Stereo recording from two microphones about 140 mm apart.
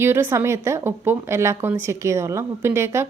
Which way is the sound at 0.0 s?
15° right (ahead or behind).